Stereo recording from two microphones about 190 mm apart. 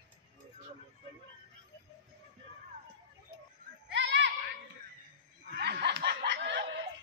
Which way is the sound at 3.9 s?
65° right (ahead or behind).